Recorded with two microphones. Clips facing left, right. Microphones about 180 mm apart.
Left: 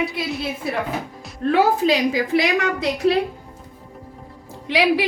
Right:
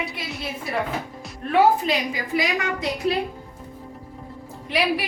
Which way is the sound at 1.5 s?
90° left.